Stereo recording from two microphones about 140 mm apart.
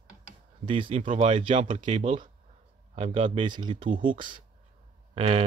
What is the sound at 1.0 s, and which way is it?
Speech, 60° right (ahead or behind).